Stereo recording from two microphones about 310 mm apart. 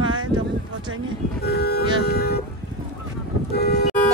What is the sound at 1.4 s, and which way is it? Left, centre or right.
Vehicle, left.